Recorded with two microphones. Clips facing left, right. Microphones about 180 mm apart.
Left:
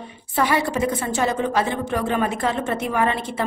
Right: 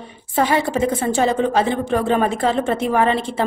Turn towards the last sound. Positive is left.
turn(degrees=-30)  # may be behind; listen again after turning